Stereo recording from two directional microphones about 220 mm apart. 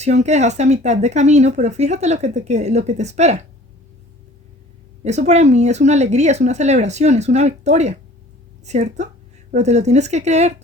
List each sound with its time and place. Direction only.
0.0 s speech: 30° right (ahead or behind)
5.0 s speech: 30° right (ahead or behind)